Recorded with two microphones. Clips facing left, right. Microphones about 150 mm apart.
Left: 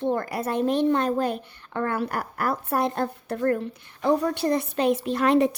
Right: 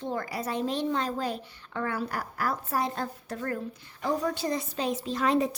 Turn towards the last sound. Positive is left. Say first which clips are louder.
# left 5 dB
turn(degrees=65)  # may be behind; listen again after turning